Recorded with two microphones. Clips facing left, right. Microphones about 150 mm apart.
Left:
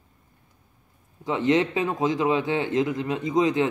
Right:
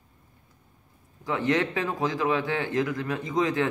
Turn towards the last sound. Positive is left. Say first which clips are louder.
# left 4 dB
turn(degrees=20)  # may be behind; listen again after turning